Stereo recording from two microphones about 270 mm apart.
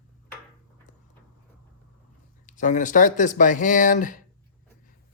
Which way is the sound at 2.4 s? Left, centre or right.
Left.